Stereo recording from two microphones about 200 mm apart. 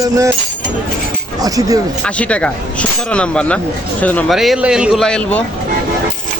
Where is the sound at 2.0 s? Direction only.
5° left (ahead or behind).